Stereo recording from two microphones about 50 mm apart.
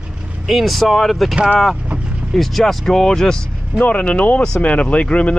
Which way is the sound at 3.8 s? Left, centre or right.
Left.